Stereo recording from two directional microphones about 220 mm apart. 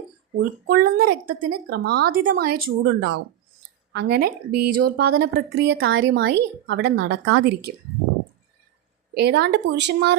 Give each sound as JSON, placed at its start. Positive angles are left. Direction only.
{"t": 0.3, "sound": "speech", "side_deg": -45}
{"t": 4.5, "sound": "speech", "side_deg": -90}
{"t": 4.8, "sound": "speech", "side_deg": -45}
{"t": 9.1, "sound": "speech", "side_deg": -50}